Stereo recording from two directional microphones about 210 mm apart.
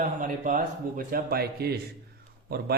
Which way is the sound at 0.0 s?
40° right (ahead or behind).